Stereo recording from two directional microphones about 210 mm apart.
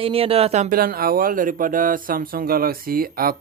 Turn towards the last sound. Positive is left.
turn(degrees=-45)  # may be behind; listen again after turning